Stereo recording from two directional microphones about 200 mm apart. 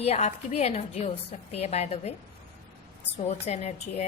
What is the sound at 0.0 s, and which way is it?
A woman's voice, 30° left (ahead or behind).